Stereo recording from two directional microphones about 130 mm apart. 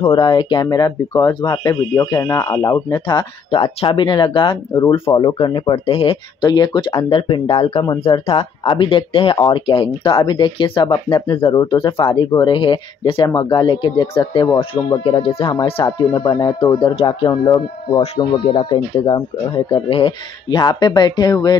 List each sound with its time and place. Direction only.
0.0 s speech: 40° left (ahead or behind); by 2.6 s 25° left (ahead or behind)
2.6 s speech: 35° left (ahead or behind)
6.4 s speech: 35° left (ahead or behind)
15.8 s speech: 35° left (ahead or behind)